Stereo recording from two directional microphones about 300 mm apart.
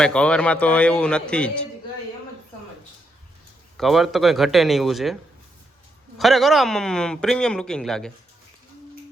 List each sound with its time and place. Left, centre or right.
0.0 s a man's voice: centre
3.8 s a man's voice: centre
6.1 s a man's voice: centre